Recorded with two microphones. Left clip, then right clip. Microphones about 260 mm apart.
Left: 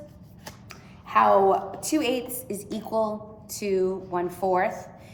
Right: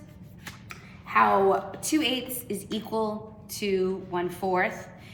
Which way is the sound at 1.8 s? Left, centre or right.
Right.